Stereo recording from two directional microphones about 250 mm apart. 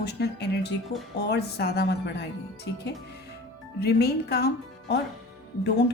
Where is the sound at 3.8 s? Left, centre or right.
Left.